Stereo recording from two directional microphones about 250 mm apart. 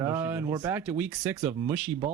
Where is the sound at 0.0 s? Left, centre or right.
Centre.